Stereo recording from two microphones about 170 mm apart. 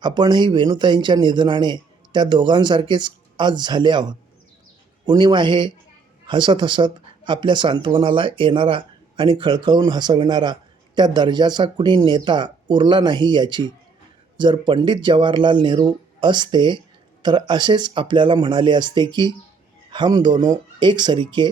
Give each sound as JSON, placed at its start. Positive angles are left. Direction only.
{"t": 0.0, "sound": "speech", "side_deg": -25}